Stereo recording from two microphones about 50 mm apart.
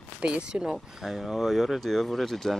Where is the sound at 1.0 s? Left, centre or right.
Centre.